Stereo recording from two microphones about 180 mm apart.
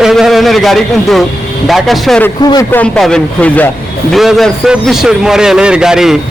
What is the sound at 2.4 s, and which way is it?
Speech, 20° left (ahead or behind).